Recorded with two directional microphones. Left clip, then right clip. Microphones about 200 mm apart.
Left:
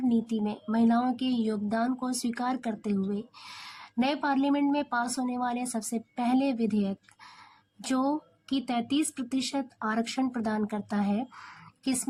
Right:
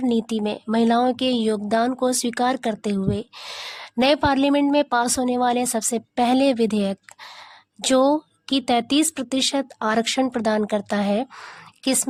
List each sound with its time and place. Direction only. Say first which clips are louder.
0.1 s speech: right 7 dB; 50° right (ahead or behind)